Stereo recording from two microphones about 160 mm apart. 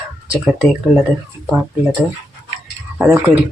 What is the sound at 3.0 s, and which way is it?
Speech, 10° right (ahead or behind).